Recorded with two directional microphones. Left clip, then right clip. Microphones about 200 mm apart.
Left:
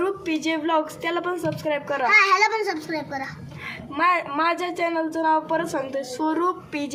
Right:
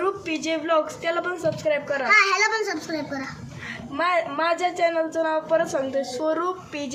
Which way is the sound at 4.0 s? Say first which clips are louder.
Left 2 dB; 30° left (ahead or behind).